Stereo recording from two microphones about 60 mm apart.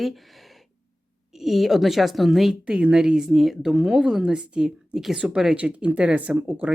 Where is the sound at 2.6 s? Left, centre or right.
Centre; by 6.7 s right.